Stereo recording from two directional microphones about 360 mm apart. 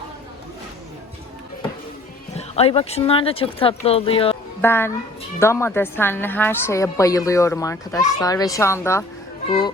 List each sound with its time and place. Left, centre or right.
2.3 s speech: centre